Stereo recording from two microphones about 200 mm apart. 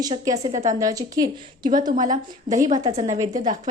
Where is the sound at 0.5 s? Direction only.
35° right (ahead or behind).